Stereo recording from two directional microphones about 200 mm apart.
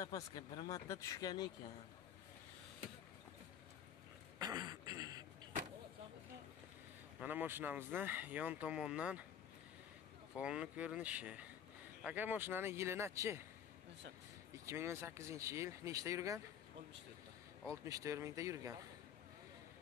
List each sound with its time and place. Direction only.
0.0 s speech: 20° left (ahead or behind)
4.4 s throat clearing: 20° right (ahead or behind)
7.2 s speech: 10° right (ahead or behind)
10.3 s speech: 5° right (ahead or behind)
14.7 s speech: 15° right (ahead or behind)
17.8 s speech: 15° right (ahead or behind)